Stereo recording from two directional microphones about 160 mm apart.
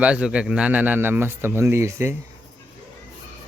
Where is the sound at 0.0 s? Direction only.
5° right (ahead or behind).